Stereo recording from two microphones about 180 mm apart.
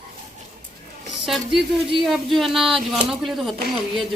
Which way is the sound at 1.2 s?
Centre (ahead or behind).